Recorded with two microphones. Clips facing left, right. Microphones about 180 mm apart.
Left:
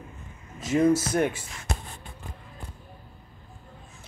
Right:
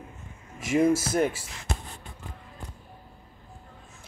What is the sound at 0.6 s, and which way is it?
Speech, 10° right (ahead or behind).